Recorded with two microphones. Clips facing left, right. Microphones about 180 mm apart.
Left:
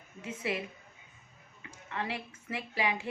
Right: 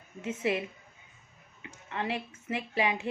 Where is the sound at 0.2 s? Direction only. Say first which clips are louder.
Right 5 dB; 25° right (ahead or behind).